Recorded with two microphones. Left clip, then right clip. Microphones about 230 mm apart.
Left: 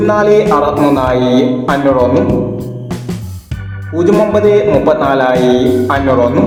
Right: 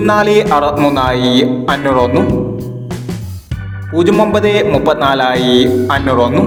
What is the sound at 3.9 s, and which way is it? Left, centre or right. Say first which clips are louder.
Music: right 1 dB; right.